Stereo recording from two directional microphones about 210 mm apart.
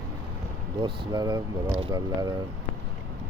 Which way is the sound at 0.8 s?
20° right (ahead or behind).